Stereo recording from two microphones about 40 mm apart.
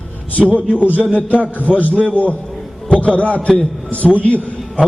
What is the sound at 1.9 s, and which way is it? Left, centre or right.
A man's voice, left.